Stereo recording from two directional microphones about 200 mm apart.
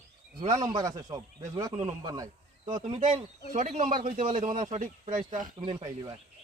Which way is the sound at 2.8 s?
35° right (ahead or behind).